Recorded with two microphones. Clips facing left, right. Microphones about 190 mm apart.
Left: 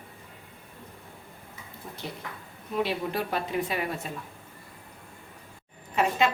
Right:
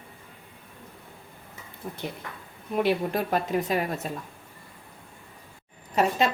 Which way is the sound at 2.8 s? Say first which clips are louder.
Right 5 dB; 45° right (ahead or behind).